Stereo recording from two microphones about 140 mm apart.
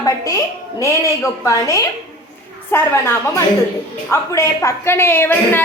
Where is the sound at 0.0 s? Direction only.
20° left (ahead or behind).